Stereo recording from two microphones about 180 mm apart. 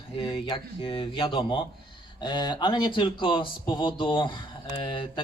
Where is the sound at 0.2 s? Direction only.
25° left (ahead or behind).